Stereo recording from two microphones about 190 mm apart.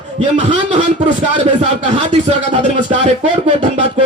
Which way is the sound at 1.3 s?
35° right (ahead or behind).